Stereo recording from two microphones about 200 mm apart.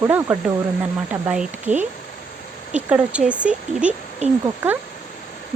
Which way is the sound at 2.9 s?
5° right (ahead or behind).